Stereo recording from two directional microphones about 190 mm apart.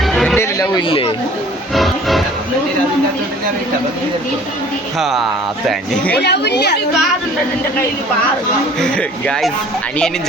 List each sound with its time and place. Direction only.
0.0 s a sound: centre (ahead or behind)
0.3 s a sound: 15° left (ahead or behind)
1.7 s music: centre (ahead or behind)
4.9 s a man's voice: centre (ahead or behind)
6.1 s a woman's voice: 60° left (ahead or behind)
8.8 s a man's voice: 5° left (ahead or behind)